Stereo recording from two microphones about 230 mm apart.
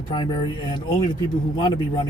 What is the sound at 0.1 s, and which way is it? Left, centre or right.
Speech, centre.